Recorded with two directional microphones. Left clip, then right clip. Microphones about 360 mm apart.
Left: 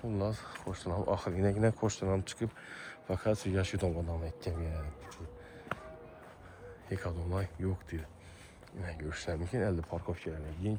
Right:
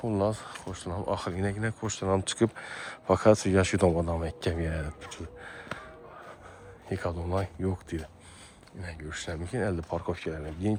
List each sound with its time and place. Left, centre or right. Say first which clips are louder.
0.1 s speech: right 7 dB; centre
3.9 s speech: right 10 dB; right
6.8 s speech: right 7 dB; centre
8.8 s speech: right 2 dB; centre